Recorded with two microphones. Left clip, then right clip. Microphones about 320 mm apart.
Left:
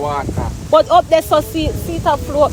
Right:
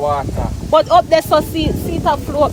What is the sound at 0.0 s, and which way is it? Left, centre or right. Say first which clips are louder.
Speech: right 2 dB; right.